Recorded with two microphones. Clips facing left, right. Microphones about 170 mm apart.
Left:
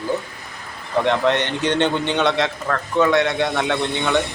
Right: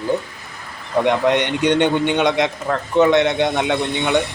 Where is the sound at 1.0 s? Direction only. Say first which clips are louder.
Right 2 dB; 15° right (ahead or behind).